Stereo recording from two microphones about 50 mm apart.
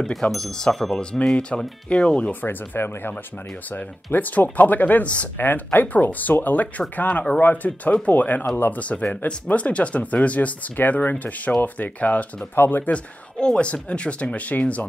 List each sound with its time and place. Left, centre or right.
0.0 s speech: centre; by 2.3 s left
2.4 s speech: left
5.5 s speech: left
12.5 s speech: left
12.9 s speech: centre